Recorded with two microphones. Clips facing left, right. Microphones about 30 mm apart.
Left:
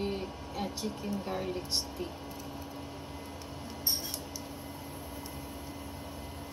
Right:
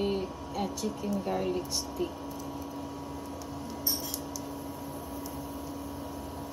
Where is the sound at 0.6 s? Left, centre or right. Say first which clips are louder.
Right 3 dB; left.